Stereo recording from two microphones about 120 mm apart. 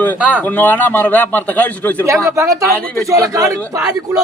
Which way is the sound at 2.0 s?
25° right (ahead or behind).